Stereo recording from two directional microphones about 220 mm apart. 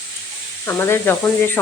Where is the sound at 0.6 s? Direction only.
10° left (ahead or behind).